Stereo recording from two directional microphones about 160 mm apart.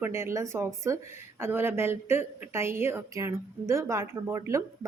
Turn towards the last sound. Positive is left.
turn(degrees=-20)  # may be behind; listen again after turning